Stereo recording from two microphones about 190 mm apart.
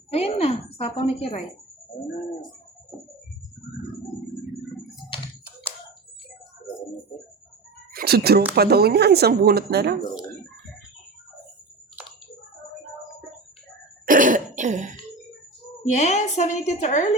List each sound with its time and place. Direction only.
0.1 s a woman's voice: 35° left (ahead or behind)
7.9 s speech: 55° right (ahead or behind)
14.0 s throat clearing: 45° right (ahead or behind)
16.0 s a woman's voice: 35° left (ahead or behind)